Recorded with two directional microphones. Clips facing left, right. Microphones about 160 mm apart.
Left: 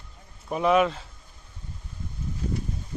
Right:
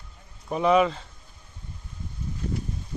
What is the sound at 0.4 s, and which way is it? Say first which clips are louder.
Speech: right 1 dB; centre (ahead or behind).